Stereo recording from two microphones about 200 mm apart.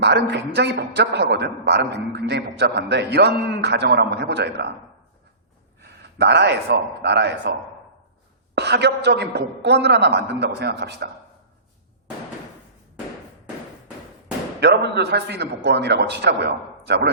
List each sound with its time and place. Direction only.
0.0 s a man's voice: 55° right (ahead or behind)
5.8 s a man's voice: 55° right (ahead or behind)
8.5 s a man's voice: 55° right (ahead or behind)
14.6 s a man's voice: 60° right (ahead or behind)